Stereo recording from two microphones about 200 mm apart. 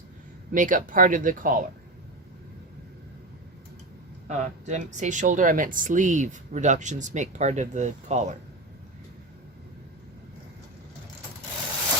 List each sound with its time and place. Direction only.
0.5 s speech: 40° right (ahead or behind)
4.3 s speech: 35° right (ahead or behind)